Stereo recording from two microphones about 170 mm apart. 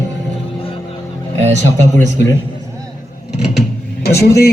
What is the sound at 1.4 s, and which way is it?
Speech, 45° right (ahead or behind).